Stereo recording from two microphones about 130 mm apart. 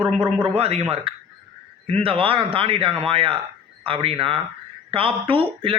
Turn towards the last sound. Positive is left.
turn(degrees=-45)  # may be behind; listen again after turning